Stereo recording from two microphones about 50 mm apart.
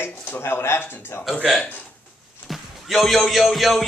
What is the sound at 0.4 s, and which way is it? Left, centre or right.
Speech, left.